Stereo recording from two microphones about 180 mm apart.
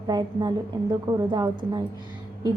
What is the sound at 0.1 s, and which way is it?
A woman's voice, 25° right (ahead or behind).